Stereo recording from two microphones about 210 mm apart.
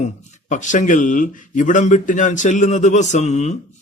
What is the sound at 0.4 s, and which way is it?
Speech, 35° left (ahead or behind).